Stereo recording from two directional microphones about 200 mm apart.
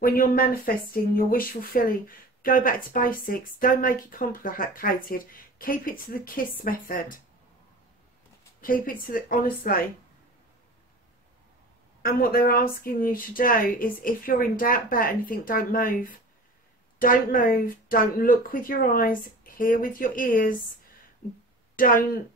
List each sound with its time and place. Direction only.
0.0 s speech: 45° left (ahead or behind)
8.5 s a woman's voice: 45° left (ahead or behind)
12.0 s speech: 50° left (ahead or behind)
21.7 s speech: 45° left (ahead or behind)